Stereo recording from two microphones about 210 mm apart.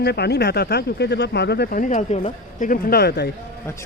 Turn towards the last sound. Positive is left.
turn(degrees=50)  # may be behind; listen again after turning